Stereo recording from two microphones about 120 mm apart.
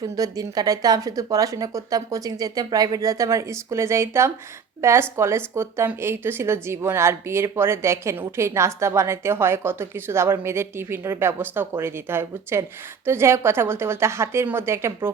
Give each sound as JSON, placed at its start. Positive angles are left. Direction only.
{"t": 0.0, "sound": "a woman's voice", "side_deg": -30}